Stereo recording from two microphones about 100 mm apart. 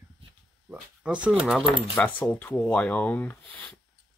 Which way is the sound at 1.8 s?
15° left (ahead or behind).